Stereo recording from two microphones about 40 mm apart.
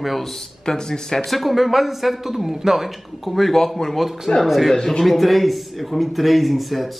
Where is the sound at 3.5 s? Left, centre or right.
Centre.